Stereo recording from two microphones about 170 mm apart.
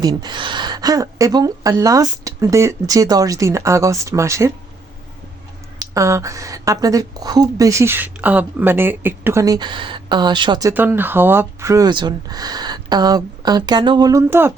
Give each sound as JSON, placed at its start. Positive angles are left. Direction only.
{"t": 0.0, "sound": "speech", "side_deg": -25}
{"t": 5.8, "sound": "speech", "side_deg": -20}